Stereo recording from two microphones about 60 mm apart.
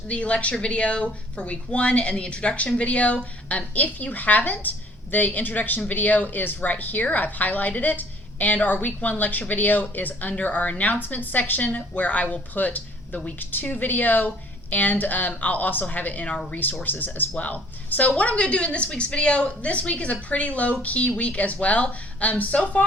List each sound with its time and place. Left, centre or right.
0.1 s speech: left